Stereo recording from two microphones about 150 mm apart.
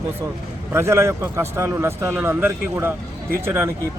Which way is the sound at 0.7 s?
15° right (ahead or behind).